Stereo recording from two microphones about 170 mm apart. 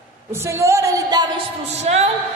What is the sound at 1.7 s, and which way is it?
Speech, 40° right (ahead or behind).